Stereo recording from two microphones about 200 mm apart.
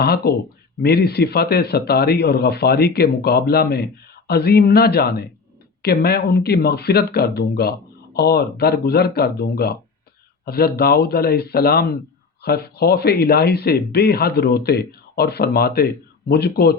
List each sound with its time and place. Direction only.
0.0 s speech: 50° left (ahead or behind)